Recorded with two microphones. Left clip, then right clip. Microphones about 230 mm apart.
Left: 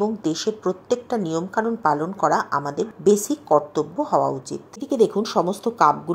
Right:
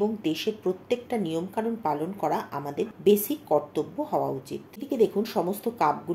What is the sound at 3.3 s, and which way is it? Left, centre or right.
Speech, centre.